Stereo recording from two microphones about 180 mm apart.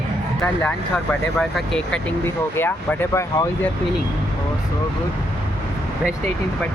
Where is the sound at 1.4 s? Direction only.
5° left (ahead or behind).